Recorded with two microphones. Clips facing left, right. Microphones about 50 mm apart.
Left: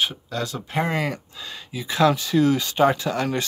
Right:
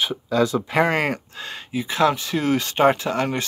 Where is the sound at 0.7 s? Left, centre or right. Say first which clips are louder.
Even; right.